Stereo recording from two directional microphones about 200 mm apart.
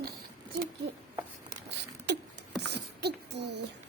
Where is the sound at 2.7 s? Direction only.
60° right (ahead or behind).